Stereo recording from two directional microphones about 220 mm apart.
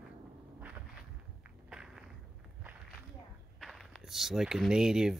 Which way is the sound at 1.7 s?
Centre (ahead or behind).